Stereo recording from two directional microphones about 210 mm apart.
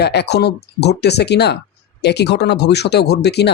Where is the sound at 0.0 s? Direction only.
50° left (ahead or behind).